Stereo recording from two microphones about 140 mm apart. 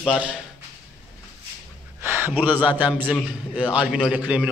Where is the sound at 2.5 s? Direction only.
10° right (ahead or behind).